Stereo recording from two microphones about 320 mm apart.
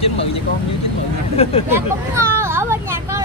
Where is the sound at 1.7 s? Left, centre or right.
Centre.